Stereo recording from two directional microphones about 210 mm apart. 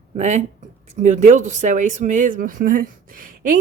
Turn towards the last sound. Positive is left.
turn(degrees=-40)  # may be behind; listen again after turning